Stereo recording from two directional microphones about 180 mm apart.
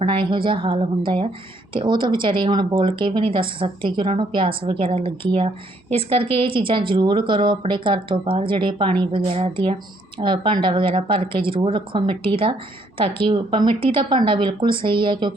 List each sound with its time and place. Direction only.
0.0 s a woman's voice: 30° right (ahead or behind)